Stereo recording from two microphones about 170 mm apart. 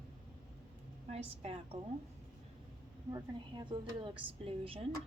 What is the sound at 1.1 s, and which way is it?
Speech, 35° right (ahead or behind).